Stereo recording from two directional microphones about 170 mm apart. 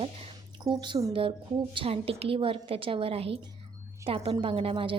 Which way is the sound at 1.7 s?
35° right (ahead or behind).